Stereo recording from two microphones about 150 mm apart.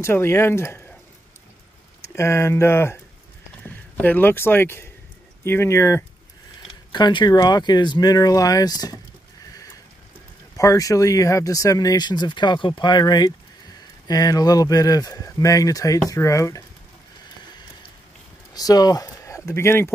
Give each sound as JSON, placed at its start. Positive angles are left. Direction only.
{"t": 0.0, "sound": "speech", "side_deg": 15}
{"t": 2.1, "sound": "speech", "side_deg": 20}
{"t": 6.9, "sound": "speech", "side_deg": 30}
{"t": 10.6, "sound": "speech", "side_deg": 20}
{"t": 18.5, "sound": "speech", "side_deg": 25}